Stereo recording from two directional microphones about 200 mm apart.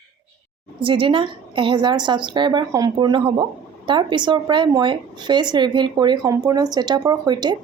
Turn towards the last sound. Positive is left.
turn(degrees=-20)  # may be behind; listen again after turning